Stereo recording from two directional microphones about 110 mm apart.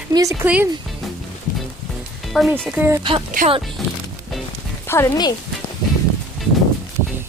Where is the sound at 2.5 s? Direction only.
15° right (ahead or behind).